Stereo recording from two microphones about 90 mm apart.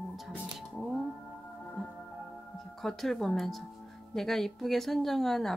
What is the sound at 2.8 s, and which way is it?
Speech, centre (ahead or behind).